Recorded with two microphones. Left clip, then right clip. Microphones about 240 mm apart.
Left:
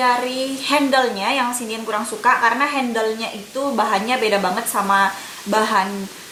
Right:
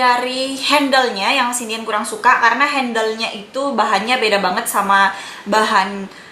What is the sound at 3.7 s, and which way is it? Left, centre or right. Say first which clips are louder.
A woman's voice: right 3 dB; centre.